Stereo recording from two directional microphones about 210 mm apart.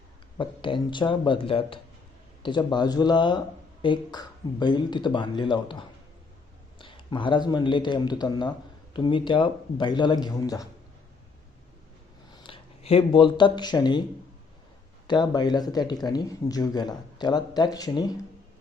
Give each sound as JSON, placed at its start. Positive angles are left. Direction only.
{"t": 0.3, "sound": "speech", "side_deg": 25}
{"t": 12.3, "sound": "speech", "side_deg": 25}
{"t": 15.0, "sound": "speech", "side_deg": 20}